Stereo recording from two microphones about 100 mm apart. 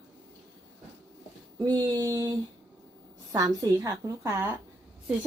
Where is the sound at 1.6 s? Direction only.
40° right (ahead or behind).